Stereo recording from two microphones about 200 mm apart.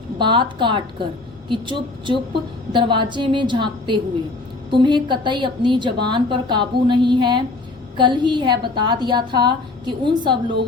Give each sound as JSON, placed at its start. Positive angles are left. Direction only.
{"t": 0.2, "sound": "a woman's voice", "side_deg": -25}